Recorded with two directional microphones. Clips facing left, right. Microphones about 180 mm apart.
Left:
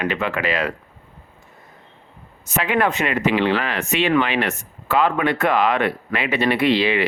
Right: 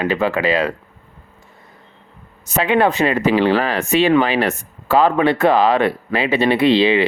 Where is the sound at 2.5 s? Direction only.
30° right (ahead or behind).